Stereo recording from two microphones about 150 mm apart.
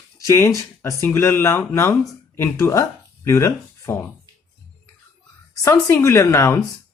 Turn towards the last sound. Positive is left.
turn(degrees=20)  # may be behind; listen again after turning